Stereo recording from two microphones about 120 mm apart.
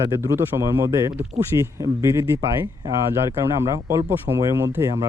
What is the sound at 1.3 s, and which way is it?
Speech, 70° right (ahead or behind).